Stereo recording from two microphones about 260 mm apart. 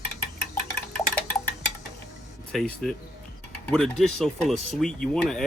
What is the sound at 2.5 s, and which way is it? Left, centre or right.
Speech, centre.